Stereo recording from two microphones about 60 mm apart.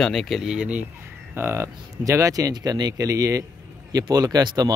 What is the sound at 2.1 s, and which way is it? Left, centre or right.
Speech, right.